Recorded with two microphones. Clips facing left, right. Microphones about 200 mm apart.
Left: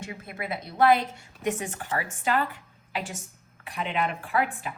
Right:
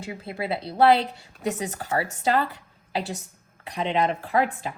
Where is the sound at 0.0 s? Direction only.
30° right (ahead or behind).